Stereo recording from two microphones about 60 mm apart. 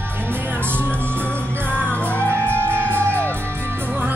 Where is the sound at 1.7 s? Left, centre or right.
Centre.